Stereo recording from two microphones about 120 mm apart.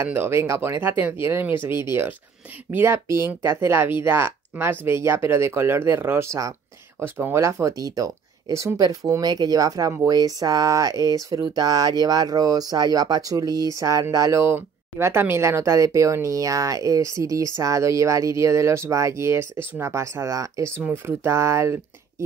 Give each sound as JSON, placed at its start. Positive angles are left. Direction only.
{"t": 0.0, "sound": "speech", "side_deg": -20}